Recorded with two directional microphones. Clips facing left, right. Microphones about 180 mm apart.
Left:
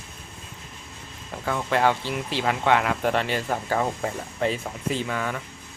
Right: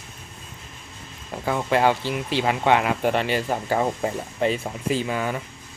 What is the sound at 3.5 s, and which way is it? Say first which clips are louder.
Speech: right 2 dB; 15° right (ahead or behind).